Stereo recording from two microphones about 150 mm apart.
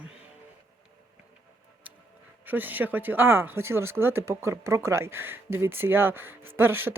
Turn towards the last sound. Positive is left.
turn(degrees=-15)  # may be behind; listen again after turning